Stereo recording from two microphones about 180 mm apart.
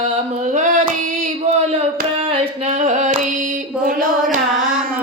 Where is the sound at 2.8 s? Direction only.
40° right (ahead or behind).